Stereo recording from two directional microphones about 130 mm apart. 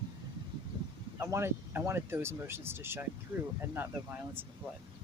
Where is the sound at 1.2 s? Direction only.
20° right (ahead or behind).